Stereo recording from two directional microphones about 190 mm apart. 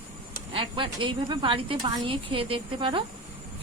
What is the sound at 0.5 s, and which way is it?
A woman's voice, 25° right (ahead or behind).